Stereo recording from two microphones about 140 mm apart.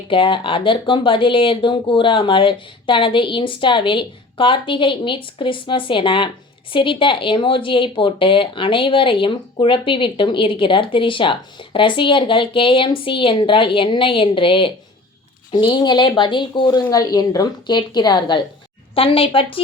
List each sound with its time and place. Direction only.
0.1 s speech: 35° left (ahead or behind)